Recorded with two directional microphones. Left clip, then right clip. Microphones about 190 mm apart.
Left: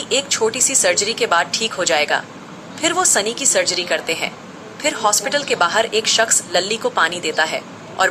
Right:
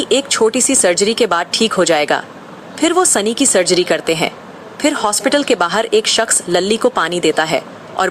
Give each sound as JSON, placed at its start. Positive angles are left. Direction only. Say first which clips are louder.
{"t": 0.0, "sound": "a woman's voice", "louder": "right 5 dB", "side_deg": -40}